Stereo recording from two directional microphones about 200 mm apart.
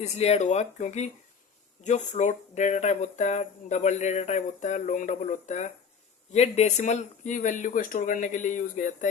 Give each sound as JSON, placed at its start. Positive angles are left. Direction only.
{"t": 0.0, "sound": "speech", "side_deg": 30}